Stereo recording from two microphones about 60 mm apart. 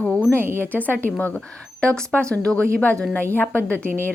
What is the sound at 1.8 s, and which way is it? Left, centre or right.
A woman's voice, centre.